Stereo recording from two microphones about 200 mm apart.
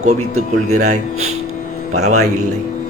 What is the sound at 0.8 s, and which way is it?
Speech, 35° right (ahead or behind).